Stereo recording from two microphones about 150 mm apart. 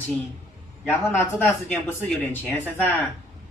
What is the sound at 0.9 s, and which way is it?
Speech, 15° left (ahead or behind).